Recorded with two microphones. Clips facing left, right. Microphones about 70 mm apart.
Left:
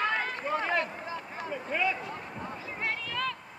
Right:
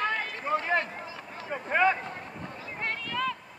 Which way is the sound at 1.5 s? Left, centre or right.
Right.